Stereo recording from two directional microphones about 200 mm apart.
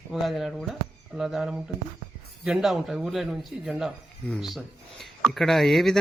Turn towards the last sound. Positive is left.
turn(degrees=0)  # may be behind; listen again after turning